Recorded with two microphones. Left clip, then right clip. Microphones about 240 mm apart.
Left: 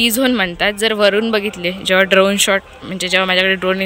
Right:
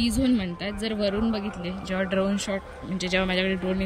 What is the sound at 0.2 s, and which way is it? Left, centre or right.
Speech, centre.